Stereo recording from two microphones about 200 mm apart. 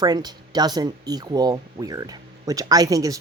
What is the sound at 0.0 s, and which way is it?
Speech, 20° right (ahead or behind).